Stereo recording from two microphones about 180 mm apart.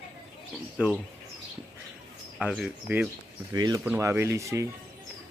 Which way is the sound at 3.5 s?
20° right (ahead or behind).